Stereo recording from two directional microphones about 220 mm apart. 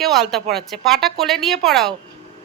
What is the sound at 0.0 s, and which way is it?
A woman's voice, centre (ahead or behind).